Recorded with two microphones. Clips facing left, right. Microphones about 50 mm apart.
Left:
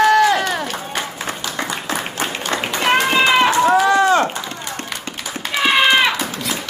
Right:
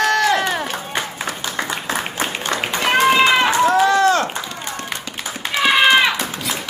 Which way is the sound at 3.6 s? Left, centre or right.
Centre.